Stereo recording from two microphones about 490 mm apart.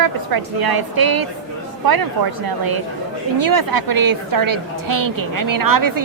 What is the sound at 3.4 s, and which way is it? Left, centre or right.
A woman's voice, right.